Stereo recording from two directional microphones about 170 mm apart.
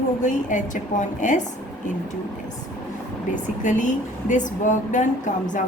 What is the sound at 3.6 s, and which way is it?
A woman's voice, 45° left (ahead or behind).